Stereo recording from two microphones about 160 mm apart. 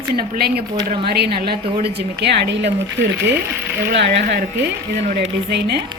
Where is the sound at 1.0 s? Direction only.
85° right.